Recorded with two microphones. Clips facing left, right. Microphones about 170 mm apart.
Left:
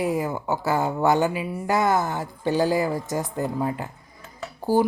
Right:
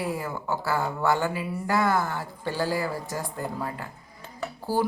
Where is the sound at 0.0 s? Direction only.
20° left (ahead or behind).